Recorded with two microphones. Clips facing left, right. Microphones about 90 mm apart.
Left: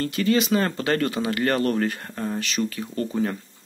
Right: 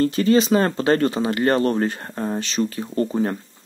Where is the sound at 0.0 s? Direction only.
30° right (ahead or behind).